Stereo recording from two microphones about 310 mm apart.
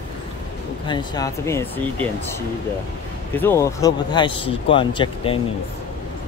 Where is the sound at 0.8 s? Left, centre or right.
Centre.